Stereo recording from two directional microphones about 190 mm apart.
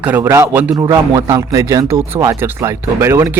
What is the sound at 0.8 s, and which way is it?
Speech, 20° right (ahead or behind).